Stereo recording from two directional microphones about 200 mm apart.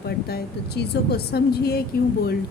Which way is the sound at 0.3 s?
50° left (ahead or behind).